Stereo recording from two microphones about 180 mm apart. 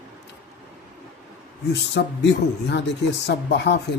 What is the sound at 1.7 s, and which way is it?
A man's voice, 75° left (ahead or behind).